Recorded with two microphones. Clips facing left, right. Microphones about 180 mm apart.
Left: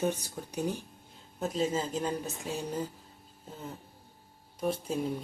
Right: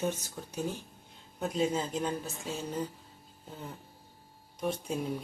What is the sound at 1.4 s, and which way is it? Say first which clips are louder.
Speech: even; centre (ahead or behind).